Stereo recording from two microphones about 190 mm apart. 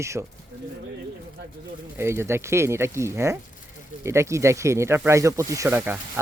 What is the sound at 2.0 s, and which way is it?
Speech, 15° right (ahead or behind).